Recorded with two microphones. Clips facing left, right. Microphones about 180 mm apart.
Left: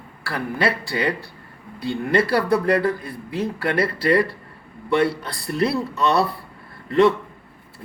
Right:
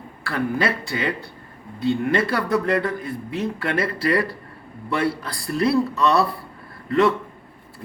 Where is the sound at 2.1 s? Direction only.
30° left (ahead or behind).